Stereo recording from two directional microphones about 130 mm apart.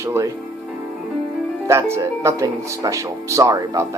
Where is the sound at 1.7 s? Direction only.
20° right (ahead or behind).